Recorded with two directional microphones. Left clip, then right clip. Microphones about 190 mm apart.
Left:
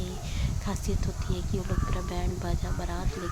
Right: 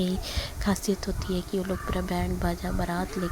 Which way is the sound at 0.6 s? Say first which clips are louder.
Right 8 dB; 25° right (ahead or behind).